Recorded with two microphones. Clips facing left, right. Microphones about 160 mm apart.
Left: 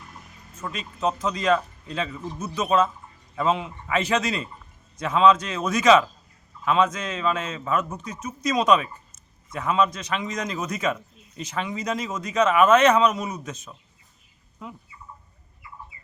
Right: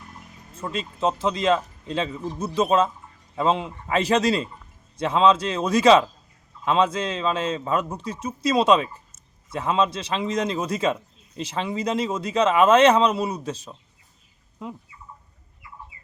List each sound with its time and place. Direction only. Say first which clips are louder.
0.5 s speech: right 4 dB; 30° right (ahead or behind)